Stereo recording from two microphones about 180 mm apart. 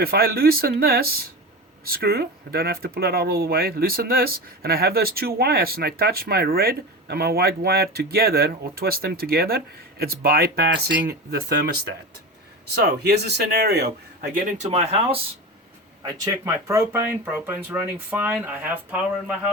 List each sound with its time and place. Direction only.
0.0 s speech: 60° right (ahead or behind)
12.7 s speech: 65° right (ahead or behind)
14.6 s speech: 35° right (ahead or behind)
16.0 s speech: 20° right (ahead or behind)